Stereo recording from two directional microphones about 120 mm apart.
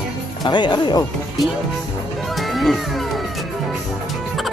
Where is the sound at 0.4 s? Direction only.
40° left (ahead or behind).